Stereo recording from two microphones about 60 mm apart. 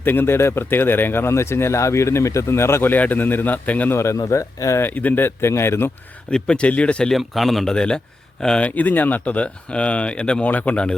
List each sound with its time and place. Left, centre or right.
0.0 s speech: left
3.9 s speech: left
4.8 s speech: left
6.3 s speech: centre
7.1 s speech: centre
8.6 s speech: left